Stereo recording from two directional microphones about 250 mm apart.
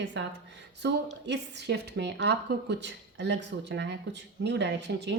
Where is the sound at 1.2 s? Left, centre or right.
Right.